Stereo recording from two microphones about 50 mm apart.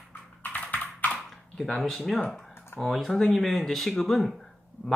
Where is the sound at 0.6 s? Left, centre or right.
Left.